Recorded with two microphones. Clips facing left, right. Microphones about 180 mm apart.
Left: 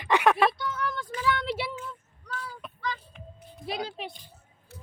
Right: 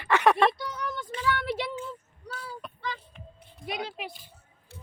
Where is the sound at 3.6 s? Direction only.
30° left (ahead or behind).